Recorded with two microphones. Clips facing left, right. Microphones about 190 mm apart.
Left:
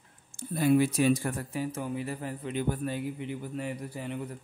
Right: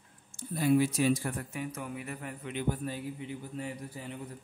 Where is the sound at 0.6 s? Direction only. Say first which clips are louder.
Left 2 dB; 60° left (ahead or behind).